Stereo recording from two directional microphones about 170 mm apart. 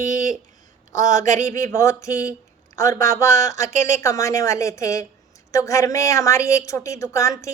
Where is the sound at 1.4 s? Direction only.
20° left (ahead or behind).